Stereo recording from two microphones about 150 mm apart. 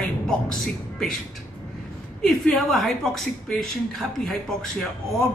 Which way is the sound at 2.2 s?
5° left (ahead or behind).